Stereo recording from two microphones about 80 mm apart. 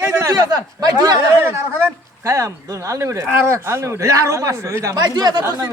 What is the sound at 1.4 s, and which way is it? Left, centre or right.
A man's voice, right.